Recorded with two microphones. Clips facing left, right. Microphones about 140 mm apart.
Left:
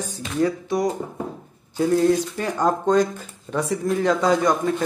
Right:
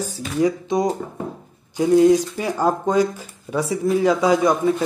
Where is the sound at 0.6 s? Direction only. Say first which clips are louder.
Right 2 dB; 20° right (ahead or behind).